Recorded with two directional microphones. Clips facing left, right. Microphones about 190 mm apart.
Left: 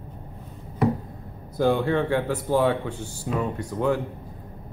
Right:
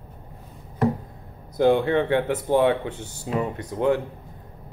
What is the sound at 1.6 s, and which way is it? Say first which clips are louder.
Speech: right 3 dB; 20° right (ahead or behind).